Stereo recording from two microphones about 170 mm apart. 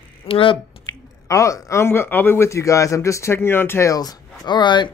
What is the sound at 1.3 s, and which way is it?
Speech, 20° left (ahead or behind).